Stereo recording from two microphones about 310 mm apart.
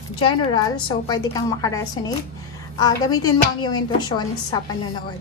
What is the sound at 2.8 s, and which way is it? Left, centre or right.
A woman's voice, centre.